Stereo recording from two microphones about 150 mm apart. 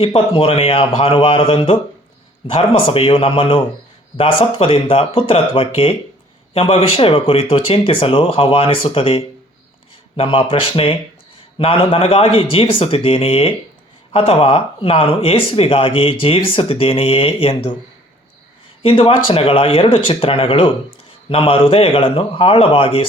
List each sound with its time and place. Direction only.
0.0 s speech: 40° left (ahead or behind)
18.8 s speech: 35° left (ahead or behind)